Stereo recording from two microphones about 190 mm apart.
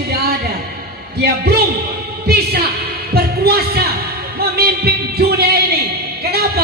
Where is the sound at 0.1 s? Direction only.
55° right (ahead or behind).